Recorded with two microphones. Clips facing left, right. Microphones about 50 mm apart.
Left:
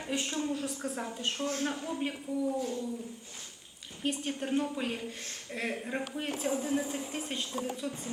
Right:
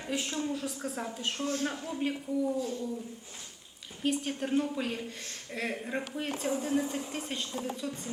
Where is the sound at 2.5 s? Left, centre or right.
Left.